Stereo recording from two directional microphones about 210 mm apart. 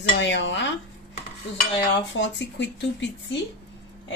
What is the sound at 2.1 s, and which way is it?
Speech, 60° left (ahead or behind).